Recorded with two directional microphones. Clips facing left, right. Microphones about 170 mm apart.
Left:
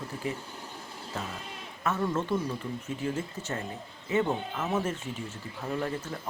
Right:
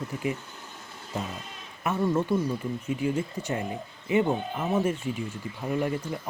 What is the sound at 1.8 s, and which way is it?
Speech, 15° right (ahead or behind).